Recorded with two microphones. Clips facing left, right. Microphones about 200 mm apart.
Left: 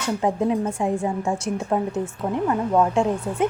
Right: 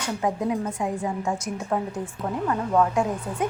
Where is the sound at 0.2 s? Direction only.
30° left (ahead or behind).